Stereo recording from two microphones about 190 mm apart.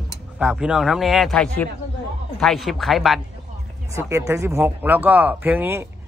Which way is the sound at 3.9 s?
15° right (ahead or behind).